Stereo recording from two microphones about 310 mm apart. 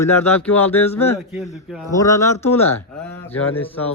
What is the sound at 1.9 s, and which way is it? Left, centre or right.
Speech, centre.